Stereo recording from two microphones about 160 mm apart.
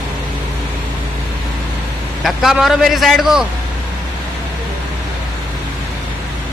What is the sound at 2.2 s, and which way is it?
A man's voice, centre (ahead or behind).